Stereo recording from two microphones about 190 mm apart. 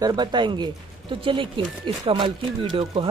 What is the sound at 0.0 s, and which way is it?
Speech, 20° right (ahead or behind).